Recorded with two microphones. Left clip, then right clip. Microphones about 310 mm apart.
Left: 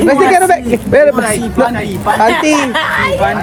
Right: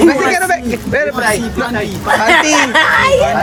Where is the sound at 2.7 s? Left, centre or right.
Right.